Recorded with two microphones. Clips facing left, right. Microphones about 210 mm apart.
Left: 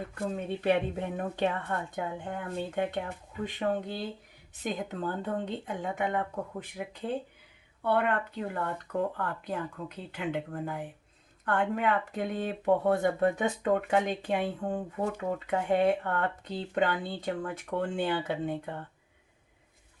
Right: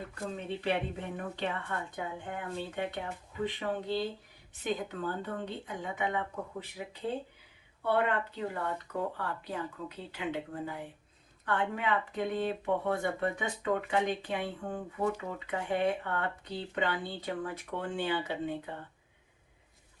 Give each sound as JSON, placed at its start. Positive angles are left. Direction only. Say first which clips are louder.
{"t": 0.3, "sound": "speech", "louder": "left 5 dB", "side_deg": 50}
{"t": 7.9, "sound": "speech", "louder": "left 2 dB", "side_deg": 55}